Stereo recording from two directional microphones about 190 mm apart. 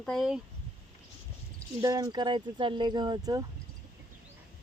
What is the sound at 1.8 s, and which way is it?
Speech, 20° right (ahead or behind).